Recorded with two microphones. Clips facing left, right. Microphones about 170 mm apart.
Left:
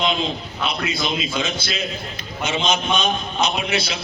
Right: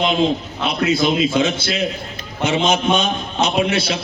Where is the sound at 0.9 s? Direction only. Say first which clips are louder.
Right 8 dB; 55° right (ahead or behind).